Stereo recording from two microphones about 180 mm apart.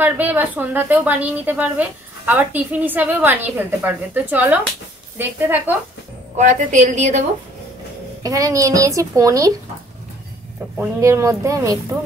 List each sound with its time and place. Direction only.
0.0 s a woman's voice: 10° right (ahead or behind)
6.3 s a woman's voice: 40° right (ahead or behind)
8.2 s a woman's voice: 20° right (ahead or behind)
10.8 s a woman's voice: 15° right (ahead or behind)